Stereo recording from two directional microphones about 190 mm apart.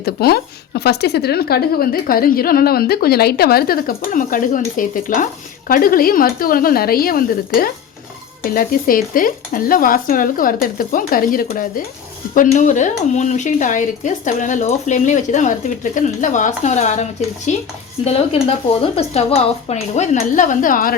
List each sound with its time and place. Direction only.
0.0 s a woman's voice: 55° left (ahead or behind)